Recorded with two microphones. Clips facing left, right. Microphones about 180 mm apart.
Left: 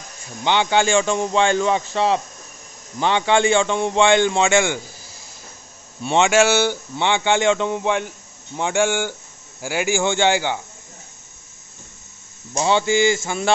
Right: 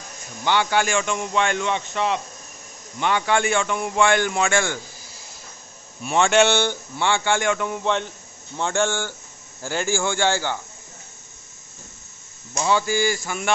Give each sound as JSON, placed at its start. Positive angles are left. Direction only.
{"t": 0.4, "sound": "a man's voice", "side_deg": 20}
{"t": 6.0, "sound": "a man's voice", "side_deg": 20}
{"t": 6.3, "sound": "a man's voice", "side_deg": 5}
{"t": 7.0, "sound": "a man's voice", "side_deg": 20}
{"t": 12.5, "sound": "a man's voice", "side_deg": 25}